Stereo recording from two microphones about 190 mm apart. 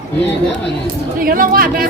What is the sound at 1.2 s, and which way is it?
Speech, 50° right (ahead or behind).